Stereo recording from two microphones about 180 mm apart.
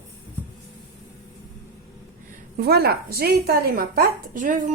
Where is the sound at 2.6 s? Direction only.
60° right (ahead or behind).